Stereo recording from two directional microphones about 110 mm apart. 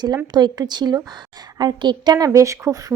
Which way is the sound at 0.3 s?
40° right (ahead or behind).